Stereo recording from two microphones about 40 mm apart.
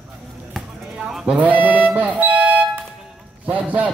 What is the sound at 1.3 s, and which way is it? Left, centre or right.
Music, right.